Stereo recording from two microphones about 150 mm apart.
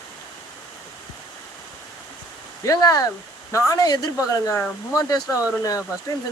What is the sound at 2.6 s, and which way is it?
Speech, 25° left (ahead or behind).